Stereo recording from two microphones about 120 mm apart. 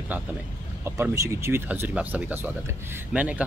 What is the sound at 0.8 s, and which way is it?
Speech, 25° right (ahead or behind).